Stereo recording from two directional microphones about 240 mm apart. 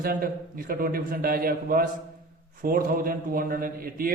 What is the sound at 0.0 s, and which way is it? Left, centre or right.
Speech, right.